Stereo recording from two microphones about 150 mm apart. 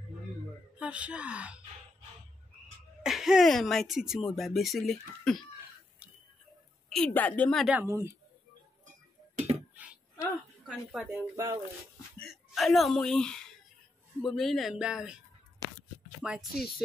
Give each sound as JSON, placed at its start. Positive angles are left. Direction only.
{"t": 0.7, "sound": "speech", "side_deg": -10}
{"t": 3.0, "sound": "speech", "side_deg": -5}
{"t": 6.9, "sound": "a woman's voice", "side_deg": 10}
{"t": 7.8, "sound": "speech", "side_deg": -20}
{"t": 9.3, "sound": "a sound", "side_deg": -50}
{"t": 9.8, "sound": "a sound", "side_deg": -10}
{"t": 12.2, "sound": "speech", "side_deg": 0}